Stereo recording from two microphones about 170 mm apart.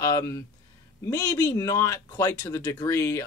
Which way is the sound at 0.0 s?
15° left (ahead or behind).